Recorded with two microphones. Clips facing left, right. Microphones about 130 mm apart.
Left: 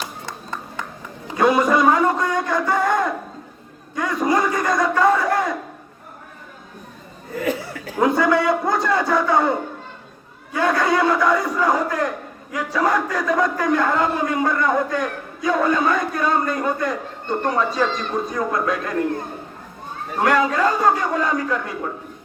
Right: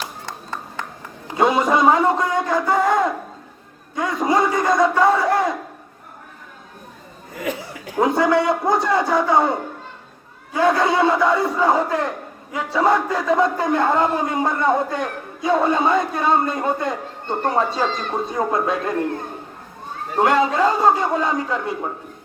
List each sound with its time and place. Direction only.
1.4 s a sound: 20° right (ahead or behind)
7.7 s a man's voice: 20° right (ahead or behind)
20.1 s a man's voice: 25° right (ahead or behind)